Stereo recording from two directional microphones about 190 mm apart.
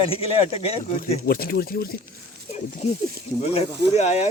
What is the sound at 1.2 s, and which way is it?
Speech, 55° left (ahead or behind).